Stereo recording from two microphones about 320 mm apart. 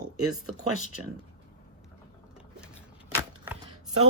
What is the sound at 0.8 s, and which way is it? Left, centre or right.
Speech, left.